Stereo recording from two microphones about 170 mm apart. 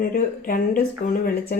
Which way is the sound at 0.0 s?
60° left (ahead or behind).